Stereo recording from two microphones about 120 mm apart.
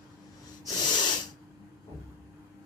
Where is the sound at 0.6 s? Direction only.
40° left (ahead or behind).